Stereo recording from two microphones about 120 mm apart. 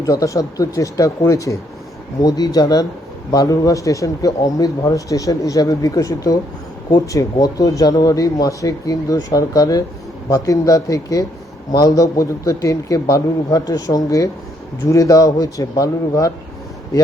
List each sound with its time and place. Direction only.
0.0 s speech: 30° left (ahead or behind)